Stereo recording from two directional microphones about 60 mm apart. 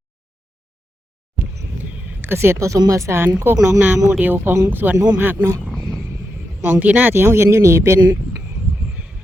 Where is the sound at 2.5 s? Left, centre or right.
Right.